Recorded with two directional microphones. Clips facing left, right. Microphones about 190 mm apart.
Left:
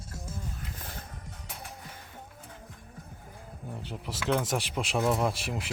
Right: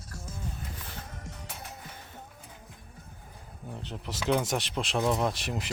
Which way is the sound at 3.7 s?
10° left (ahead or behind).